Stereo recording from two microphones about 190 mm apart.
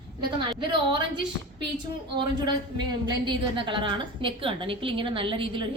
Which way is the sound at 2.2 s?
20° right (ahead or behind).